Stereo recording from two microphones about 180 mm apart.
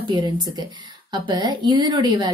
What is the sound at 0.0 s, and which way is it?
Speech, 25° right (ahead or behind).